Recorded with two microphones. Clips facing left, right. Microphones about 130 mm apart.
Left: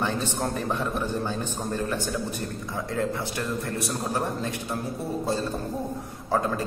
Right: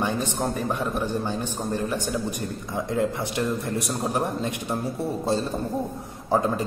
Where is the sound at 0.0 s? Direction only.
15° right (ahead or behind).